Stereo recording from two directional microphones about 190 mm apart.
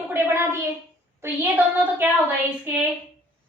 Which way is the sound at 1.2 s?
10° right (ahead or behind).